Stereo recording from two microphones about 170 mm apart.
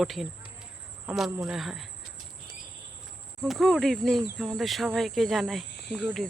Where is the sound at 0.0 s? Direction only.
Centre (ahead or behind).